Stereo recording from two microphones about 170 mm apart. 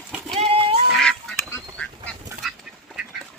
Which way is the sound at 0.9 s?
Centre (ahead or behind).